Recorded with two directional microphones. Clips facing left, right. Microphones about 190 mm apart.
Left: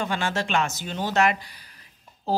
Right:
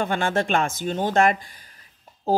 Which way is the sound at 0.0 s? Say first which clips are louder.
Right 4 dB; 55° right (ahead or behind).